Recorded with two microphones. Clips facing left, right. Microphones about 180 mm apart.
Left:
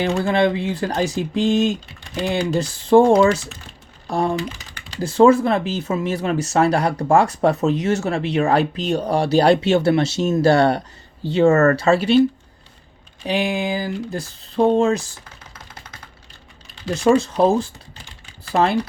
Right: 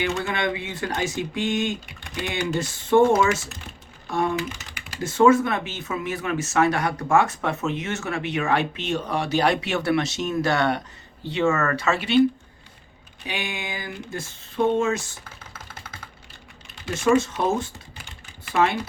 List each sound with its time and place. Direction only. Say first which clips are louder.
0.0 s speech: left 7 dB; 35° left (ahead or behind)
4.0 s typing: left 3 dB; 30° left (ahead or behind)
4.9 s speech: left 4 dB; 30° left (ahead or behind)
13.2 s speech: left 11 dB; 35° left (ahead or behind)
16.8 s speech: left 4 dB; 35° left (ahead or behind)